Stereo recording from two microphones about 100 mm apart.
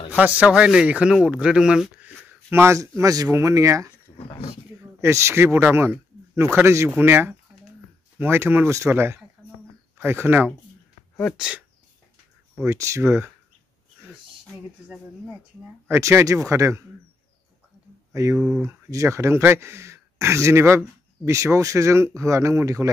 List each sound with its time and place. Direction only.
0.1 s speech: 15° right (ahead or behind)
2.2 s a sound: 25° right (ahead or behind)
3.0 s speech: 35° right (ahead or behind)
5.0 s speech: 25° right (ahead or behind)
11.3 s speech: 10° right (ahead or behind)
12.6 s speech: 30° right (ahead or behind)
15.9 s speech: 25° right (ahead or behind)
18.1 s speech: 30° right (ahead or behind)